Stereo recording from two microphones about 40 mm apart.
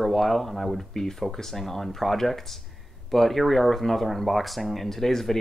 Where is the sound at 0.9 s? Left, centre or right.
Centre.